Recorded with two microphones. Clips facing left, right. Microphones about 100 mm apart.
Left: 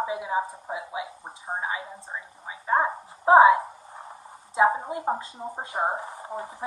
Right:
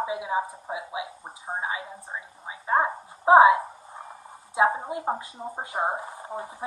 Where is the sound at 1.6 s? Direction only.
15° right (ahead or behind).